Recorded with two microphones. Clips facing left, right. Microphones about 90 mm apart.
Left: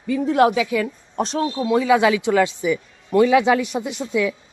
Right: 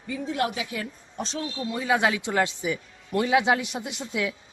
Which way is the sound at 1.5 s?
85° left.